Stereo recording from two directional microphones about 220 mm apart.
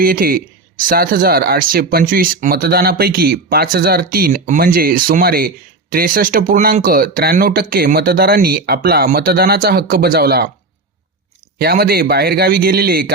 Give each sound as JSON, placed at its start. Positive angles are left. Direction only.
{"t": 0.0, "sound": "speech", "side_deg": -40}
{"t": 11.6, "sound": "speech", "side_deg": -45}